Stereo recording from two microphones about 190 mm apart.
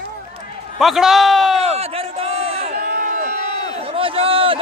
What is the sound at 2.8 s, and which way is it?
Run, 45° right (ahead or behind).